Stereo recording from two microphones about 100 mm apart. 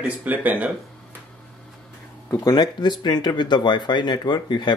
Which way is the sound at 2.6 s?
45° left (ahead or behind).